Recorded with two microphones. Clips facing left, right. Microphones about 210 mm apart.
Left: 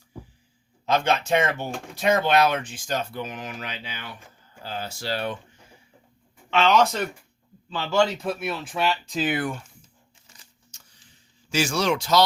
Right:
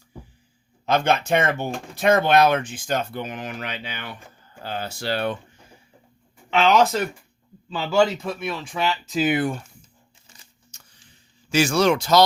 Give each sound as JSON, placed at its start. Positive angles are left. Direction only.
{"t": 0.9, "sound": "speech", "side_deg": -55}
{"t": 6.6, "sound": "speech", "side_deg": -10}
{"t": 11.4, "sound": "speech", "side_deg": -60}